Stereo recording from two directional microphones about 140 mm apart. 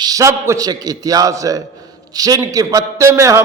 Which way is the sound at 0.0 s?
25° right (ahead or behind).